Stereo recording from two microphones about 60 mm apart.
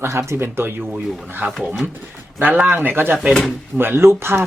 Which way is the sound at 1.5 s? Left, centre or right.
Centre.